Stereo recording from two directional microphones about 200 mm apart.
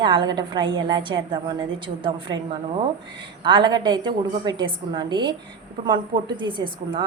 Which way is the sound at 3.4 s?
20° right (ahead or behind).